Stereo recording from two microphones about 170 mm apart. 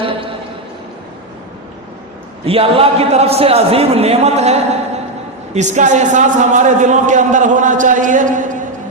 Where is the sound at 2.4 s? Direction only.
35° right (ahead or behind).